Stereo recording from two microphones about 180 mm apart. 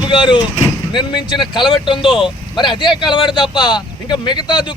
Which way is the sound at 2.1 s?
5° right (ahead or behind).